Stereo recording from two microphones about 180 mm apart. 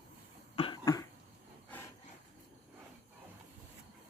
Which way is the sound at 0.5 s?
30° left (ahead or behind).